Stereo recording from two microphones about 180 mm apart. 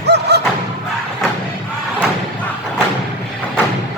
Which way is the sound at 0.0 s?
65° right (ahead or behind).